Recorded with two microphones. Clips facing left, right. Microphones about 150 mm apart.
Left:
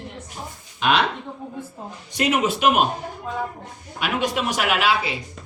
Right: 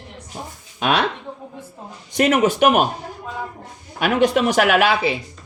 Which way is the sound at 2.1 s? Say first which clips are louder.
Right 4 dB; 50° right (ahead or behind).